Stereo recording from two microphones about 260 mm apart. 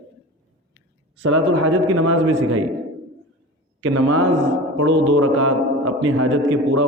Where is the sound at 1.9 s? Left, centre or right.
Right.